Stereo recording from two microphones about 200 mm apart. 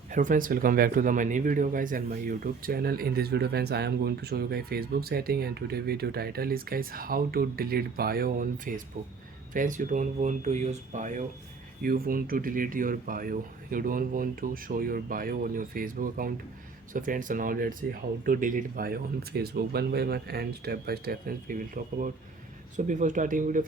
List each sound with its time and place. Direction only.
0.1 s speech: 40° right (ahead or behind)